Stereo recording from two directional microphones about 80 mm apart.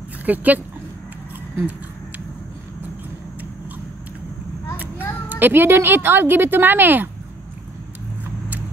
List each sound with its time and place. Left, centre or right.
0.2 s speech: right
5.3 s a woman's voice: right